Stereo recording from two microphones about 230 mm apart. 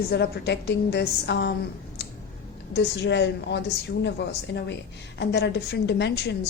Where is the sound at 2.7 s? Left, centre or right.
Left.